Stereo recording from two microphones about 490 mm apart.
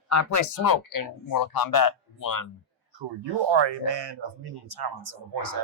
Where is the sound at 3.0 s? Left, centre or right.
Right.